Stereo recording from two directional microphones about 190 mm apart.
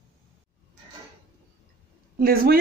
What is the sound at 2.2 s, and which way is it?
Speech, 50° right (ahead or behind).